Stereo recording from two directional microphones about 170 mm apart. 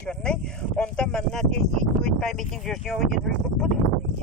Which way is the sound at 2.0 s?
5° left (ahead or behind).